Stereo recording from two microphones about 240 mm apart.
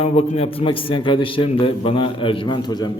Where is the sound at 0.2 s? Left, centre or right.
Left.